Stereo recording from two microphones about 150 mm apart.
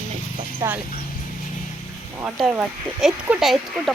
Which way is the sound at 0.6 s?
20° right (ahead or behind).